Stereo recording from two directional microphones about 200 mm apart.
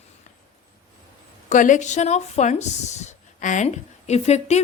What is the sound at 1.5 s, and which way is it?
Speech, 40° left (ahead or behind).